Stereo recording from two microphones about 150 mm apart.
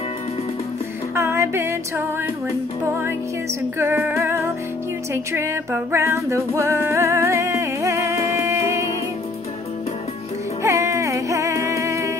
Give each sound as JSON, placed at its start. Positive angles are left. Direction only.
{"t": 1.1, "sound": "music", "side_deg": -20}
{"t": 3.7, "sound": "music", "side_deg": -15}
{"t": 10.6, "sound": "music", "side_deg": -20}